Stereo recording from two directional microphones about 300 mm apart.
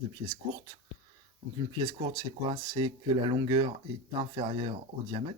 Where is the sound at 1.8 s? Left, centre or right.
Centre.